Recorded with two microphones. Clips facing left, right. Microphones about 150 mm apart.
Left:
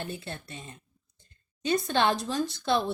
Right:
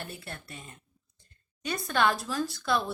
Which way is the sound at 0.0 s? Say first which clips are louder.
Left 4 dB; 20° left (ahead or behind).